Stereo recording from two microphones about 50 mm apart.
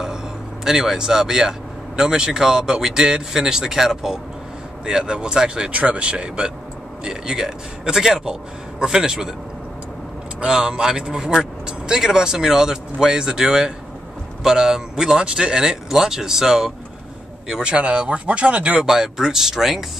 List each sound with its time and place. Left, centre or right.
0.7 s speech: centre
10.4 s speech: centre
18.9 s speech: centre